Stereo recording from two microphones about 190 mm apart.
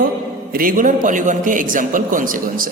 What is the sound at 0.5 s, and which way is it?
A man's voice, 50° right (ahead or behind).